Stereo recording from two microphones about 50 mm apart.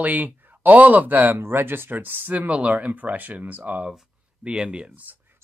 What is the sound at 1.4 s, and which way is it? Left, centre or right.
Speech, right.